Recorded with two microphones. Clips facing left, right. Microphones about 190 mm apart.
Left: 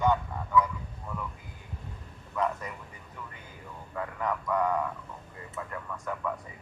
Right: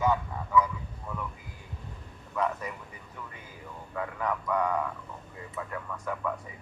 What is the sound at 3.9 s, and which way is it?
Speech, centre (ahead or behind).